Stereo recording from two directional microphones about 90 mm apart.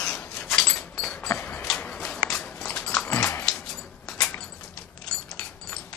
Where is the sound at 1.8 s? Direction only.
10° left (ahead or behind).